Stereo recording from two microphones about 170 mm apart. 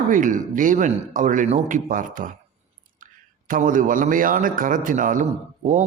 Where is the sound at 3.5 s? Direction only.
50° right (ahead or behind).